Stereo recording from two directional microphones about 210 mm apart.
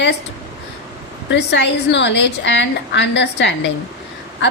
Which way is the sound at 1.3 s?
55° left (ahead or behind).